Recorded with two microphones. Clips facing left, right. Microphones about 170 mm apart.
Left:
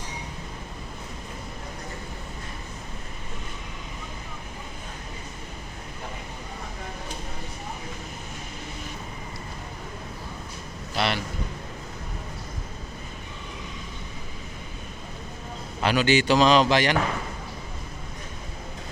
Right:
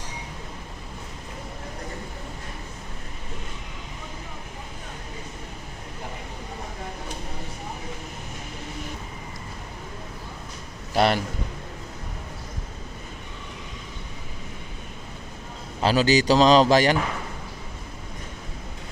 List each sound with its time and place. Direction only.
10.9 s a man's voice: 45° right (ahead or behind)
15.8 s a man's voice: 35° right (ahead or behind)